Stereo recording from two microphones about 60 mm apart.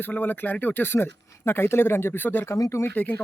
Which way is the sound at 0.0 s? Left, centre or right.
Left.